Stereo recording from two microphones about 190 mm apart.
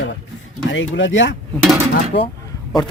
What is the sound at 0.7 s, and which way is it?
Speech, 80° left.